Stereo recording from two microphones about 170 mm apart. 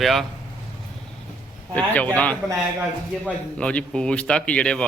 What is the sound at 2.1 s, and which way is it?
A man's voice, 10° left (ahead or behind).